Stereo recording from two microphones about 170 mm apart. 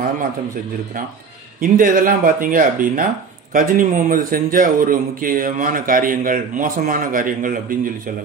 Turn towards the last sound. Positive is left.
turn(degrees=-55)  # may be behind; listen again after turning